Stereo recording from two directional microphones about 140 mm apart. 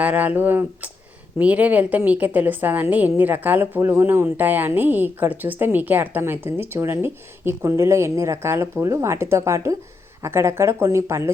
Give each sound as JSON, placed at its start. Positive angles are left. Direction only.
{"t": 0.0, "sound": "a woman's voice", "side_deg": -10}